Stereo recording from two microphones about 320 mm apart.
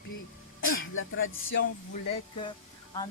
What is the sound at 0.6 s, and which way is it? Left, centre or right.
Speech, left.